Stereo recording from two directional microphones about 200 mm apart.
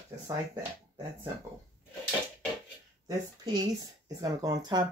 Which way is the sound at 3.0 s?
20° right (ahead or behind).